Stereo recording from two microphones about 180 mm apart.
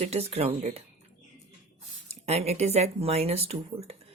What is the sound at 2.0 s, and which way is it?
A woman's voice, 35° right (ahead or behind).